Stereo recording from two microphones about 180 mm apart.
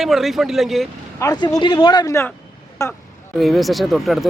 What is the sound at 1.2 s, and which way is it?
Speech, 25° left (ahead or behind).